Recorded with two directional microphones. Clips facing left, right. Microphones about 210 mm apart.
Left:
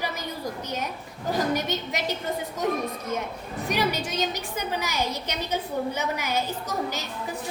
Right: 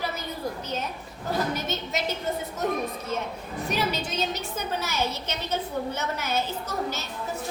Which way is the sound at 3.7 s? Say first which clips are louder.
Left 2 dB; 15° left (ahead or behind).